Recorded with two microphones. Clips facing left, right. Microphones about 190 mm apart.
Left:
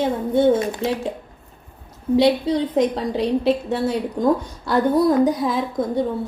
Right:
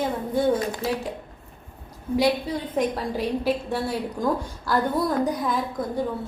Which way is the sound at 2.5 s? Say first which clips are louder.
Left 7 dB; 80° left.